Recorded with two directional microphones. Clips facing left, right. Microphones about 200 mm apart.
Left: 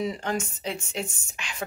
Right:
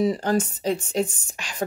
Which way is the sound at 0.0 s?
35° right (ahead or behind).